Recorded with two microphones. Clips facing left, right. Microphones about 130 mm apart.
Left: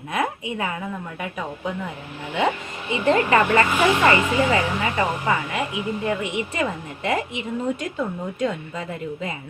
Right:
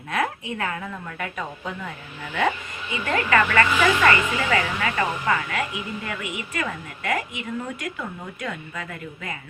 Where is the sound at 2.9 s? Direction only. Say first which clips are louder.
Left 4 dB; 25° left (ahead or behind).